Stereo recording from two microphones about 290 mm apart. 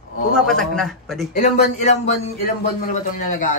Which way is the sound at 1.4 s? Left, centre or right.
Left.